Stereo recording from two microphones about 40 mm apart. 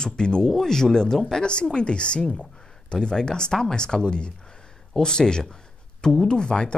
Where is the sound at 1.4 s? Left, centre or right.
Left.